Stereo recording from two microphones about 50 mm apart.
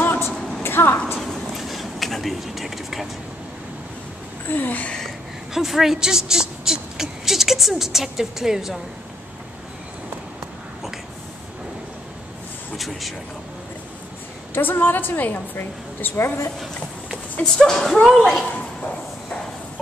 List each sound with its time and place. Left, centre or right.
0.0 s a sound: left
1.2 s a sound: centre
4.5 s a woman's voice: left
5.5 s a woman's voice: centre
12.7 s speech: centre
14.5 s a woman's voice: left
17.4 s speech: centre